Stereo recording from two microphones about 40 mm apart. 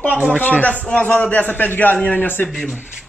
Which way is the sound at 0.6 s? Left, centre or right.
Left.